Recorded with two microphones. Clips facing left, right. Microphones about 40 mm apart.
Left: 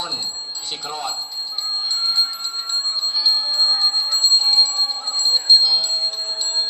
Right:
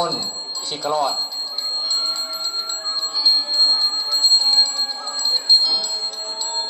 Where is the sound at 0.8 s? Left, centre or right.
Left.